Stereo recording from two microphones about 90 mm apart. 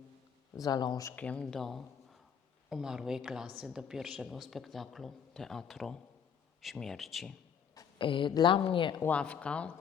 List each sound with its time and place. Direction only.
0.5 s speech: 45° left (ahead or behind)
1.1 s speech: 15° left (ahead or behind)
7.9 s speech: 70° left (ahead or behind)
8.3 s a woman's voice: 55° left (ahead or behind)
8.5 s speech: 75° left (ahead or behind)
9.0 s speech: 15° left (ahead or behind)